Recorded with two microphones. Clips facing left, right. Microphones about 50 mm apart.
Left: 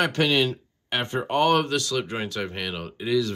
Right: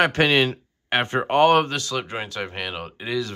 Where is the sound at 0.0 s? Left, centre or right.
Right.